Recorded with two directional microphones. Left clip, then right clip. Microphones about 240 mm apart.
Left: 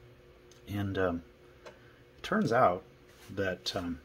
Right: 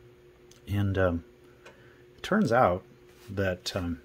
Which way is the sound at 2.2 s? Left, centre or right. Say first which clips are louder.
Right 3 dB; right.